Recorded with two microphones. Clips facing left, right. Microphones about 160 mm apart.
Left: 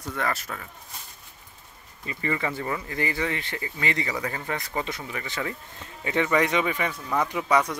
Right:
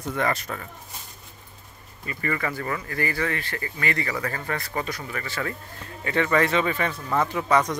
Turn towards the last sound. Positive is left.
turn(degrees=10)  # may be behind; listen again after turning